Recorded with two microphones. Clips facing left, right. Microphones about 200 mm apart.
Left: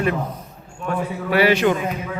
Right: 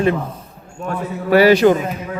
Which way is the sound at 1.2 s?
40° right (ahead or behind).